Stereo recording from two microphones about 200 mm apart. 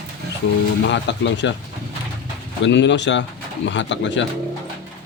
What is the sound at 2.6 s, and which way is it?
Speech, 60° left (ahead or behind).